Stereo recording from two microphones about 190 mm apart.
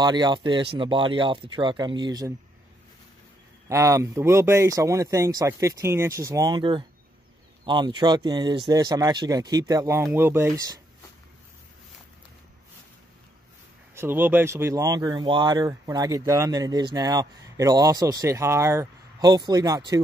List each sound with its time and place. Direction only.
0.0 s speech: 20° right (ahead or behind)
3.6 s speech: 15° right (ahead or behind)
13.9 s speech: 10° right (ahead or behind)